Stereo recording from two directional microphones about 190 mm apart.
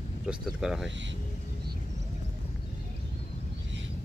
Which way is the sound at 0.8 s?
70° right (ahead or behind).